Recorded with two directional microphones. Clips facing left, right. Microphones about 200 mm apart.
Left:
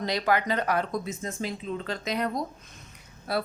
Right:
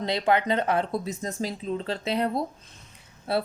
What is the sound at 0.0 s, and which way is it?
Speech, 25° right (ahead or behind).